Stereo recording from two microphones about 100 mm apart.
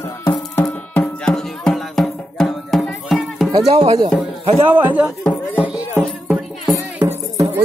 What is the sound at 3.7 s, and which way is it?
Music, 80° right.